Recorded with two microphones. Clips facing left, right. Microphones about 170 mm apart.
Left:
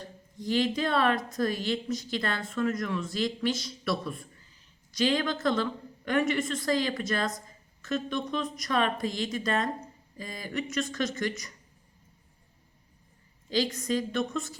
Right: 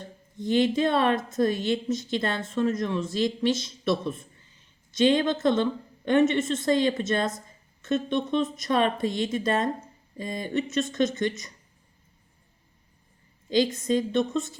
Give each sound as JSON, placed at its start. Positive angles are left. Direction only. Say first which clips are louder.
{"t": 0.3, "sound": "speech", "louder": "right 5 dB", "side_deg": -25}
{"t": 13.5, "sound": "speech", "louder": "right 5 dB", "side_deg": -25}